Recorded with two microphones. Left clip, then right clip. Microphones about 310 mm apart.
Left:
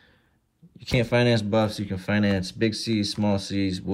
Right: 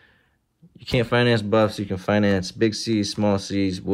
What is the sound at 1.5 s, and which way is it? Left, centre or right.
Speech, centre.